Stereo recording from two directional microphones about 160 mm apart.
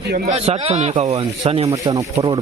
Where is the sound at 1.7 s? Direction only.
20° right (ahead or behind).